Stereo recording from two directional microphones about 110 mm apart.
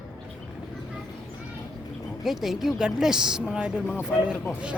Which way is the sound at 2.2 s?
5° right (ahead or behind).